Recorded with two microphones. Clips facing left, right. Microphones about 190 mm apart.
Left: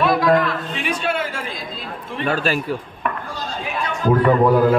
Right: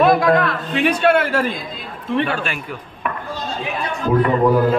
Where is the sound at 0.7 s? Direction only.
65° right (ahead or behind).